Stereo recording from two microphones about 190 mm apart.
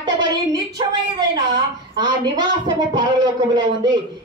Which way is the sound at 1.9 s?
20° right (ahead or behind).